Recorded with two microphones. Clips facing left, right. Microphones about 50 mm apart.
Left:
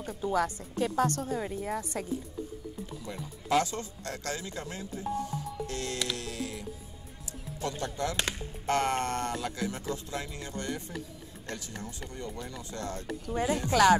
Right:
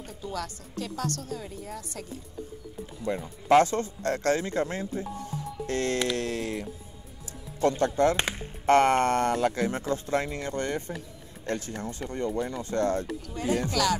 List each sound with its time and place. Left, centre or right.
0.2 s a woman's voice: left
3.1 s speech: right
13.3 s a woman's voice: left